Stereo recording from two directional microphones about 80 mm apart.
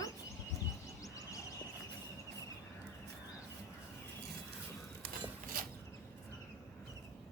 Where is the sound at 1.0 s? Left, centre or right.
Left.